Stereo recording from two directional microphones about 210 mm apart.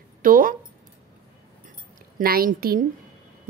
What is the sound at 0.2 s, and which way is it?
Speech, 40° right (ahead or behind).